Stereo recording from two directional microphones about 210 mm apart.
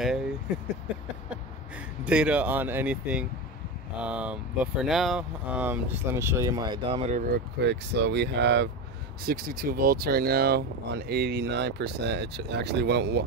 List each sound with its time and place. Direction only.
0.0 s a sound: 5° right (ahead or behind)
2.0 s speech: 5° right (ahead or behind); by 7.2 s 30° right (ahead or behind)
7.3 s speech: 55° right (ahead or behind)